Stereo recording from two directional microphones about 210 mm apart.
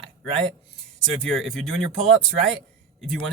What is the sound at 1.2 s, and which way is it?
Speech, centre (ahead or behind).